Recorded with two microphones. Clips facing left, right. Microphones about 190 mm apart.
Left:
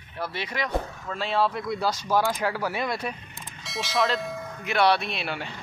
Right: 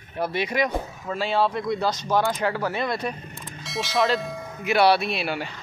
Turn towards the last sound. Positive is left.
turn(degrees=-5)  # may be behind; listen again after turning